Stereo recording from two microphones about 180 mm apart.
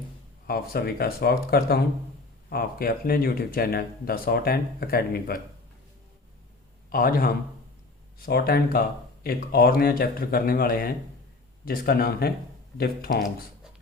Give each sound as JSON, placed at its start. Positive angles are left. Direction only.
{"t": 0.4, "sound": "speech", "side_deg": 55}
{"t": 6.9, "sound": "a man's voice", "side_deg": 55}